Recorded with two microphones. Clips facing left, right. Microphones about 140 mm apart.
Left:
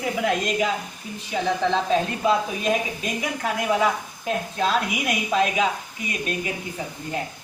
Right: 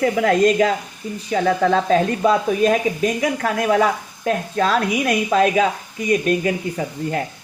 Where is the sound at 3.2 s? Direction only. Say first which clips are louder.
Right 6 dB; 60° right (ahead or behind).